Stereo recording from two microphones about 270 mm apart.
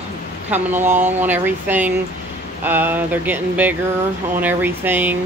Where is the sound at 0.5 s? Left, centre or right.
Centre.